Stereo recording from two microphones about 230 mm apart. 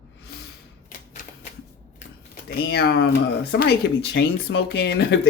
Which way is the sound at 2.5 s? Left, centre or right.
Left.